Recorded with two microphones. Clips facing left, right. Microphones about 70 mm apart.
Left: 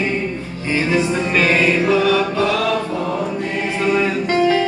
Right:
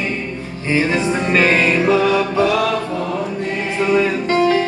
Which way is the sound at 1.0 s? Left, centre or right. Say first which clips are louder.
Right 1 dB; centre.